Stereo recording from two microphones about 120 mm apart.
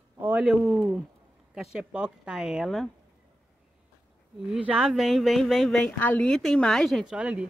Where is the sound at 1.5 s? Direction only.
5° right (ahead or behind).